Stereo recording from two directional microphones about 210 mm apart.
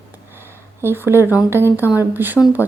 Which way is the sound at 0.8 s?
10° right (ahead or behind).